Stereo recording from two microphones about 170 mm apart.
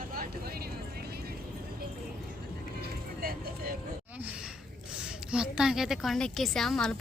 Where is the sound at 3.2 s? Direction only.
60° right (ahead or behind).